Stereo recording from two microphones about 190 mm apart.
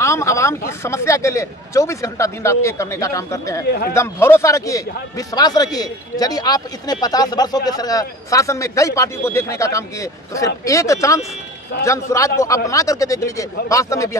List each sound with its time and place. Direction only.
0.0 s a man's voice: 15° left (ahead or behind)